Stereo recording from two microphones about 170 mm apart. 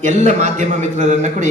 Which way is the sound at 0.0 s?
40° right (ahead or behind).